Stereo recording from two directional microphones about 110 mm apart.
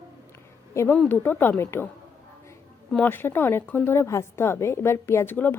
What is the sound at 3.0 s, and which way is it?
A woman's voice, 20° left (ahead or behind).